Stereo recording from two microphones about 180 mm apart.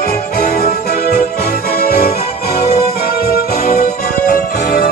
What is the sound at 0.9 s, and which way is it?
Music, 60° left (ahead or behind).